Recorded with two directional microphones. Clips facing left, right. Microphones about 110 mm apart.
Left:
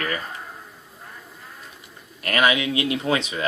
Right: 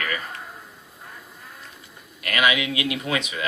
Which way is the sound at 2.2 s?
35° left (ahead or behind).